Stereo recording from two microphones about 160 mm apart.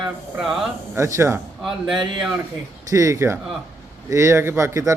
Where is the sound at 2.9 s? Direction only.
20° right (ahead or behind).